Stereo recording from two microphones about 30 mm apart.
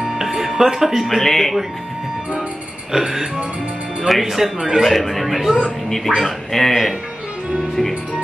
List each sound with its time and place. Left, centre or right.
0.2 s music: centre
0.7 s speech: centre
1.0 s speech: centre
2.9 s music: right
4.0 s speech: centre
4.8 s a man's voice: centre
5.9 s speech: centre